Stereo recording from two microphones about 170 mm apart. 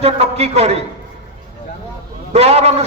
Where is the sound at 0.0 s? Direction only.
35° right (ahead or behind).